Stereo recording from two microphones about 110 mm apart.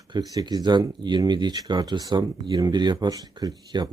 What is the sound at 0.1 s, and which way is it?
Speech, 40° right (ahead or behind).